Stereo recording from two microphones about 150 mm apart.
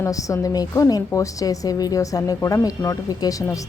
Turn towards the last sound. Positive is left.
turn(degrees=20)  # may be behind; listen again after turning